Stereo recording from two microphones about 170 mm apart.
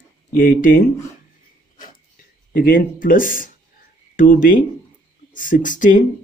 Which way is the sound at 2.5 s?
55° left (ahead or behind).